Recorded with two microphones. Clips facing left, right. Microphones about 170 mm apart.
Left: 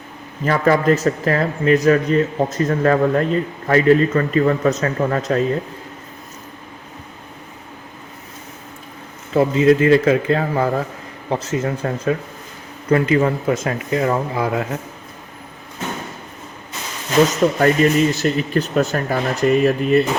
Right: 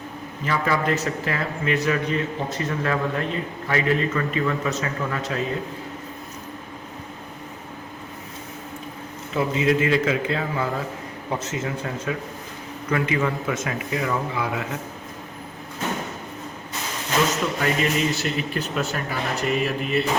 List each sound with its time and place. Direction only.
0.4 s speech: 45° left (ahead or behind)
9.3 s a man's voice: 40° left (ahead or behind)
17.4 s speech: 40° left (ahead or behind)